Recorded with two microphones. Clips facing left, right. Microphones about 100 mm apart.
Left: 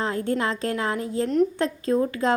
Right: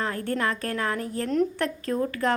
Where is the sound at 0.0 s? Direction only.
20° left (ahead or behind).